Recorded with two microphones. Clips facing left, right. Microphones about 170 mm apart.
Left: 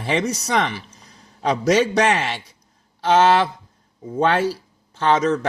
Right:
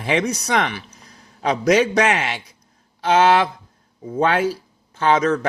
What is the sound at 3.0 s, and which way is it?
Speech, 35° left (ahead or behind).